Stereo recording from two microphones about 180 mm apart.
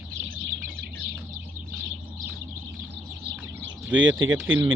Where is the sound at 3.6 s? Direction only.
90° right.